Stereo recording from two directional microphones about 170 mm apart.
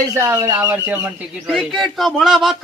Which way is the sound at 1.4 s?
Centre (ahead or behind).